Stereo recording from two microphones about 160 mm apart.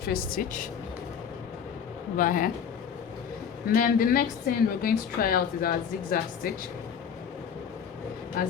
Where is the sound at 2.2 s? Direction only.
55° left (ahead or behind).